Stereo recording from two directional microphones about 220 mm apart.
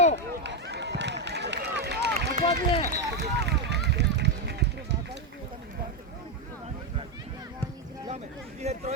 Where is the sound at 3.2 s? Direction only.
50° right (ahead or behind).